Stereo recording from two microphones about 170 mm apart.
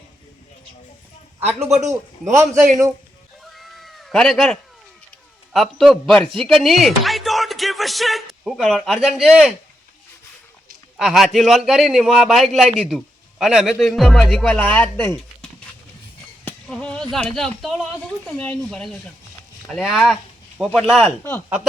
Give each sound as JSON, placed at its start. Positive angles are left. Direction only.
{"t": 1.4, "sound": "a man's voice", "side_deg": -40}
{"t": 3.4, "sound": "cat", "side_deg": 0}
{"t": 5.5, "sound": "a man's voice", "side_deg": 0}
{"t": 10.9, "sound": "a man's voice", "side_deg": 0}
{"t": 16.4, "sound": "a sound", "side_deg": 5}
{"t": 18.3, "sound": "a man's voice", "side_deg": 5}